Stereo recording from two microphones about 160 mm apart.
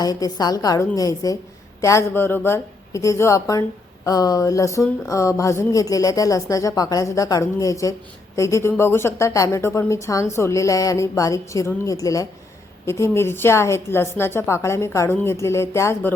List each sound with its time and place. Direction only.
0.0 s a woman's voice: 25° left (ahead or behind)